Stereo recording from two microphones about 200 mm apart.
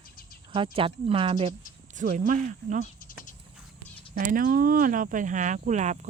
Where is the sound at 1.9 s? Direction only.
40° right (ahead or behind).